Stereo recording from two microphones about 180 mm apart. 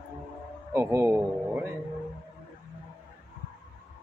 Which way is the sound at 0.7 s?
15° right (ahead or behind).